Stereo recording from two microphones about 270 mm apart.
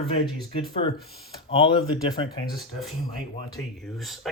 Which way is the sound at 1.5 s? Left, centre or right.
Centre.